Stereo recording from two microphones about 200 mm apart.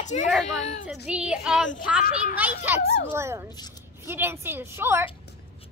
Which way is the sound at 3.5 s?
20° left (ahead or behind).